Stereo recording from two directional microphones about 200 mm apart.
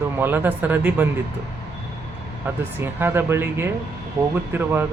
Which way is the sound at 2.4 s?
10° right (ahead or behind).